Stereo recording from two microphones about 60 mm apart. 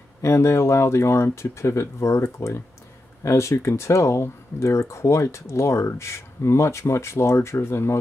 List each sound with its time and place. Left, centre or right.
0.2 s speech: left